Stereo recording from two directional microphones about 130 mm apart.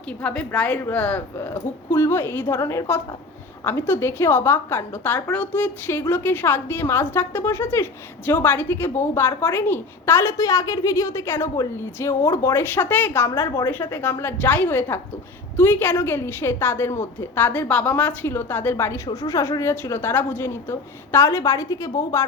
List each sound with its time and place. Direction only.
0.2 s a woman's voice: 10° left (ahead or behind)
19.0 s a woman's voice: 30° left (ahead or behind)